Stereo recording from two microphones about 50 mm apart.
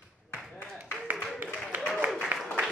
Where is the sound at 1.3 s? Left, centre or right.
Right.